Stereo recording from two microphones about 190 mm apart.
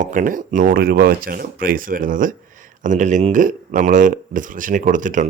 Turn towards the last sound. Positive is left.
turn(degrees=-40)  # may be behind; listen again after turning